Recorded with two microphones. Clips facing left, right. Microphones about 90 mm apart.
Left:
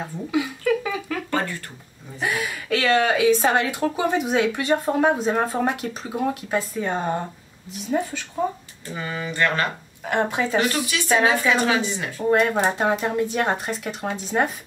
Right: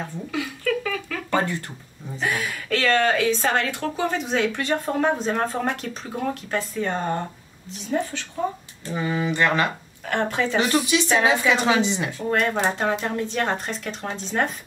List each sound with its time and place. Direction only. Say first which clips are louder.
0.0 s a sound: left 4 dB; 15° left (ahead or behind)
1.3 s a sound: right 3 dB; 20° right (ahead or behind)
2.1 s a woman's voice: even; 10° left (ahead or behind)
8.9 s speech: right 4 dB; 10° right (ahead or behind)
10.0 s a woman's voice: left 1 dB; 10° left (ahead or behind)
10.7 s a woman's voice: right 2 dB; 20° right (ahead or behind)
12.2 s a woman's voice: left 5 dB; 15° left (ahead or behind)